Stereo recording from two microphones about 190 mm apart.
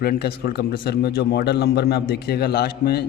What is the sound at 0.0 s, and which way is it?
A man's voice, 55° left (ahead or behind).